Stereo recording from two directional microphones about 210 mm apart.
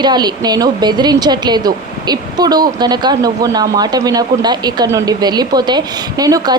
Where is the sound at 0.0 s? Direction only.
20° right (ahead or behind).